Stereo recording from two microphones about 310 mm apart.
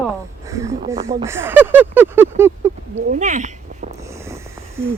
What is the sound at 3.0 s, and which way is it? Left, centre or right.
Speech, right.